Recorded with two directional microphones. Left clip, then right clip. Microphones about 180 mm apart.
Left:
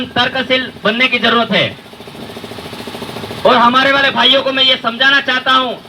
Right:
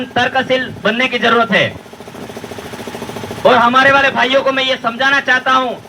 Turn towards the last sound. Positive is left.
turn(degrees=50)  # may be behind; listen again after turning